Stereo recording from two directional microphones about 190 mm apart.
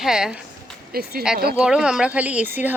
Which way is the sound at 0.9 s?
50° right (ahead or behind).